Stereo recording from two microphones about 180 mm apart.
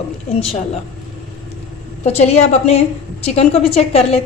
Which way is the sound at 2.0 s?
35° left (ahead or behind).